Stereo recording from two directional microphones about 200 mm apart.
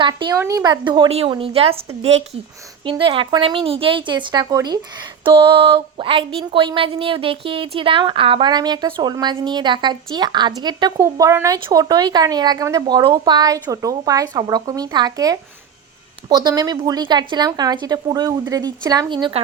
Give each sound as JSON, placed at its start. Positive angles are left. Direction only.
{"t": 0.0, "sound": "speech", "side_deg": -20}